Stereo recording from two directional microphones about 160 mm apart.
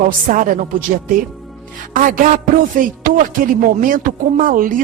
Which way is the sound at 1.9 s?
55° right (ahead or behind).